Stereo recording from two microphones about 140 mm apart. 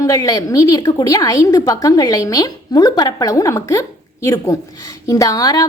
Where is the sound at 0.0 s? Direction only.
25° left (ahead or behind).